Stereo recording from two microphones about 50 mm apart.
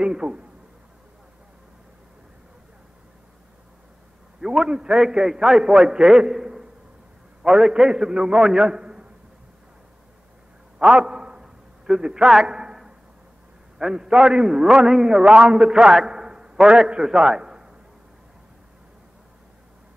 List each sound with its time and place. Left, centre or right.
0.0 s a man's voice: centre
4.4 s a man's voice: centre
10.8 s a sound: centre
13.7 s a man's voice: centre